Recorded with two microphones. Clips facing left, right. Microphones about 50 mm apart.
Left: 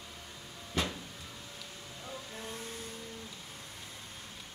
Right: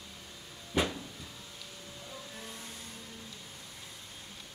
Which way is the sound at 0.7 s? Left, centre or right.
Centre.